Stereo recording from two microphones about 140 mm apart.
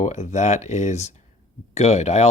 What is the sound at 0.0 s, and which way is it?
Speech, 55° left (ahead or behind).